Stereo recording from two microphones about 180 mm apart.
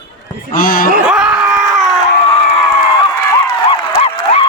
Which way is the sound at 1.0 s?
5° right (ahead or behind).